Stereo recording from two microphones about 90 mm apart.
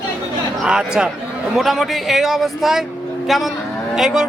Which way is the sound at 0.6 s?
10° right (ahead or behind).